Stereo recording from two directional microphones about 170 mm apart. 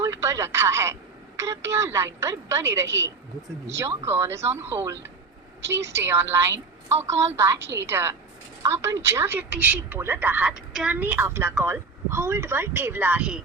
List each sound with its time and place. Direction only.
0.0 s a woman's voice: 15° right (ahead or behind)
6.0 s a woman's voice: 15° right (ahead or behind)